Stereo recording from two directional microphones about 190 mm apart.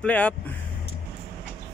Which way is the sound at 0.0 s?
5° left (ahead or behind).